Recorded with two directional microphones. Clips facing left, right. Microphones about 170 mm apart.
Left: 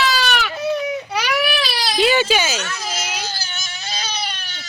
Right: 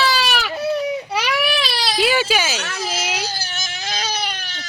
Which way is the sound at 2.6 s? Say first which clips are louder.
Right 2 dB; 30° right (ahead or behind).